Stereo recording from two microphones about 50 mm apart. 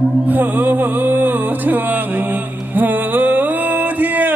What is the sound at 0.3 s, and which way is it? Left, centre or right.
Music, right.